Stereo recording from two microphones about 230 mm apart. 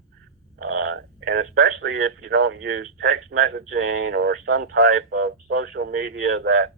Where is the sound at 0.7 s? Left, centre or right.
Right.